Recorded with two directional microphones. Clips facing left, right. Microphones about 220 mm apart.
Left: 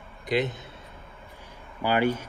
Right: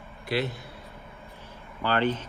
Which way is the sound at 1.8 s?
10° left (ahead or behind).